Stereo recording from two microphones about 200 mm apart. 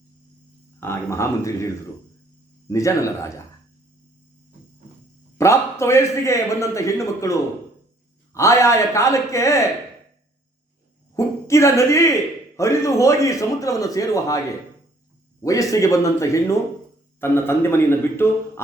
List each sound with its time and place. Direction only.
0.8 s a man's voice: 15° left (ahead or behind)
5.4 s a man's voice: 15° left (ahead or behind)
11.1 s a man's voice: 15° left (ahead or behind)